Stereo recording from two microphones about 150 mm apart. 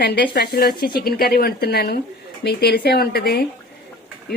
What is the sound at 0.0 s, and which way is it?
Speech, 90° left.